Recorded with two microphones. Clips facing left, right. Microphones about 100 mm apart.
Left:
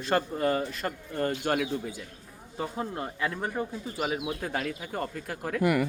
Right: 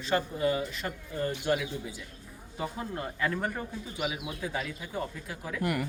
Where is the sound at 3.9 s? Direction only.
45° left (ahead or behind).